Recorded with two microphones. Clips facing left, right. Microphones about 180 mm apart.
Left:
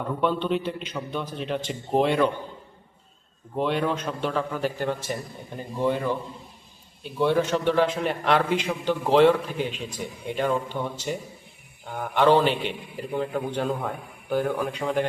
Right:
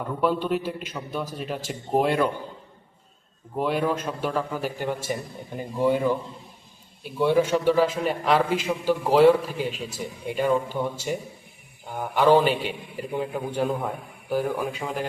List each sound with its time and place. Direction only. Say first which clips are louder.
0.2 s a man's voice: right 1 dB; 5° right (ahead or behind)
3.5 s a man's voice: even; 5° right (ahead or behind)
12.1 s a man's voice: right 1 dB; 10° right (ahead or behind)